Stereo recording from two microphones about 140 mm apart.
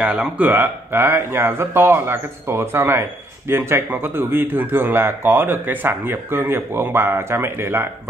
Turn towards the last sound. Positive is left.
turn(degrees=-15)  # may be behind; listen again after turning